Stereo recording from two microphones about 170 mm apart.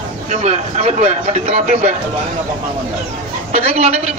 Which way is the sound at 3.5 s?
40° right (ahead or behind).